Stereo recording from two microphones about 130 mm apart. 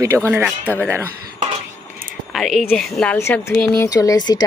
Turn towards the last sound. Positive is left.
turn(degrees=30)  # may be behind; listen again after turning